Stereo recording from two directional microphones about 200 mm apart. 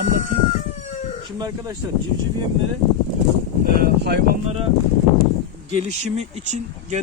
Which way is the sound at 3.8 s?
50° right (ahead or behind).